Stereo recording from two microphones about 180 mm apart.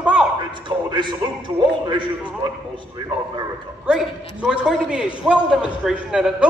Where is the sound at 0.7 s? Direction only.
25° right (ahead or behind).